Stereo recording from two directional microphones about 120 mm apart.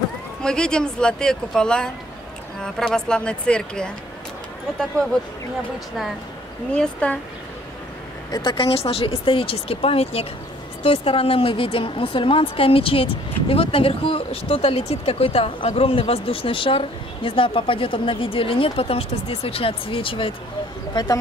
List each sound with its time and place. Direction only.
0.4 s speech: 5° left (ahead or behind)
6.7 s speech: 10° left (ahead or behind)
8.3 s speech: 40° left (ahead or behind)
20.9 s speech: 35° left (ahead or behind)